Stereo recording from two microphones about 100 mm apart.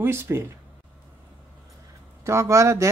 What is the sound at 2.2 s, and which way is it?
Speech, 30° right (ahead or behind).